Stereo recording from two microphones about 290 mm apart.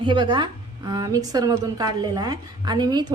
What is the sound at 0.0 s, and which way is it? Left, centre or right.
A woman's voice, centre.